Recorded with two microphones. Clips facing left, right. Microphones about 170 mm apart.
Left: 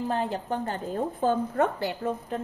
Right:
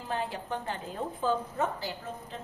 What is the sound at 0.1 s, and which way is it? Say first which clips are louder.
A woman's voice: left 5 dB; 45° left (ahead or behind).